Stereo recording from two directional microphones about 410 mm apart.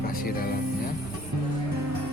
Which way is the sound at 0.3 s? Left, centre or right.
Left.